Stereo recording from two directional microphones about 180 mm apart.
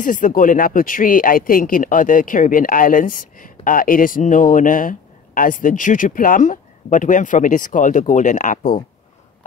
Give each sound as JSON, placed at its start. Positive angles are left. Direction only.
{"t": 0.0, "sound": "speech", "side_deg": 50}